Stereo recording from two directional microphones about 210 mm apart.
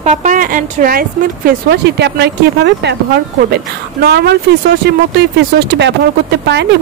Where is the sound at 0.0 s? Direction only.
35° right (ahead or behind); by 3.0 s 55° right (ahead or behind).